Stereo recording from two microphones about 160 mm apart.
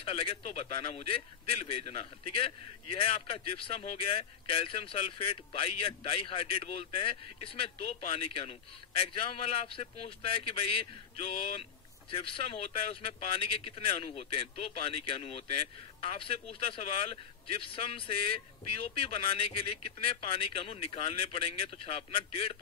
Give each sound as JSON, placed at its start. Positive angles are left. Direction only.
{"t": 0.0, "sound": "a man's voice", "side_deg": 35}
{"t": 12.1, "sound": "a man's voice", "side_deg": 35}